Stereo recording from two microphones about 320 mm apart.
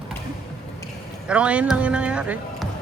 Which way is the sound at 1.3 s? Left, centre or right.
Centre.